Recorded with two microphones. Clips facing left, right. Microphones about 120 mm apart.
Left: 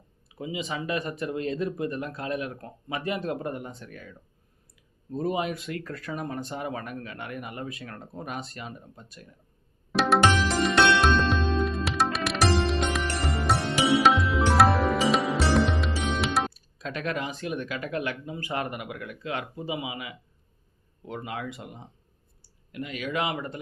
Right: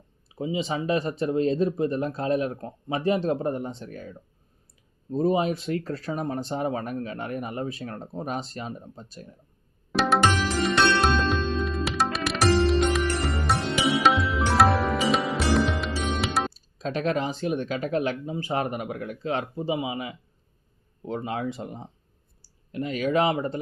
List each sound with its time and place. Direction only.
0.3 s speech: 30° right (ahead or behind)
9.9 s music: centre (ahead or behind)
16.6 s speech: 30° right (ahead or behind)